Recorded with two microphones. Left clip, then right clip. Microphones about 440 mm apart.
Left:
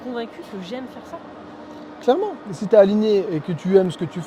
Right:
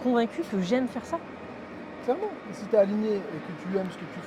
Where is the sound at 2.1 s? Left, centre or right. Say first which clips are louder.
Left 10 dB; left.